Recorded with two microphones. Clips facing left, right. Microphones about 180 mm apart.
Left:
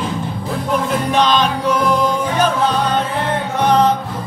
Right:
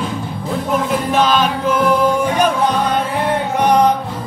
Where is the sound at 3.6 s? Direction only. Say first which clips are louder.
Even; 10° right (ahead or behind).